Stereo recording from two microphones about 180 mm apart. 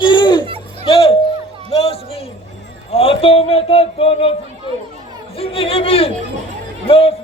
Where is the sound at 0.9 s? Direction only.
30° left (ahead or behind).